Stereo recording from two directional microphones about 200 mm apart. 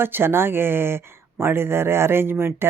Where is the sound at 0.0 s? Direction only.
10° right (ahead or behind).